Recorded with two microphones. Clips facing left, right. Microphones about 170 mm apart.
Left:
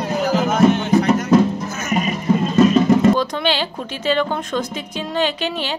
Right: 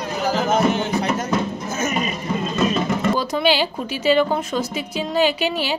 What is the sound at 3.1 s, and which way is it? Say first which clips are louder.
A woman's voice: right 1 dB; 10° right (ahead or behind).